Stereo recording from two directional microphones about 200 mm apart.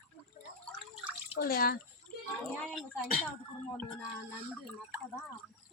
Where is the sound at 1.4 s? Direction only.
50° left (ahead or behind).